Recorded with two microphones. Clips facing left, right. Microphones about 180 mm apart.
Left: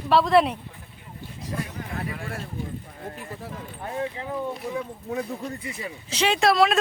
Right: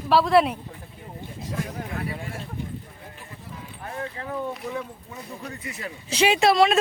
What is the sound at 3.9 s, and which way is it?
Speech, 20° left (ahead or behind).